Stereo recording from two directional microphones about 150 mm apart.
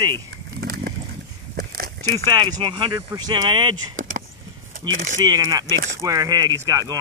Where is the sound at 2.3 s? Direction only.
30° right (ahead or behind).